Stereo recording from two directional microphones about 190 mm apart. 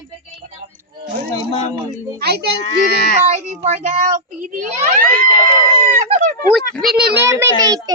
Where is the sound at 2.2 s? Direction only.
60° right (ahead or behind).